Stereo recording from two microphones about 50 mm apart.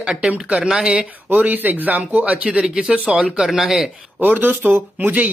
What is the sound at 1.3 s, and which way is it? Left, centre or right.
Speech, right.